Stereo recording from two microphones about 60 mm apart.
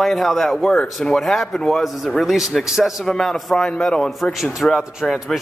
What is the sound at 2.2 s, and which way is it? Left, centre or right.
A man's voice, centre.